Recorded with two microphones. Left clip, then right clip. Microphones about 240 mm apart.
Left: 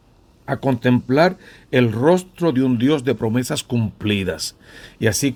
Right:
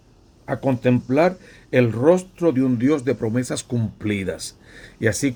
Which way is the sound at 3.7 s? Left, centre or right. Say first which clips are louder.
Left 3 dB; left.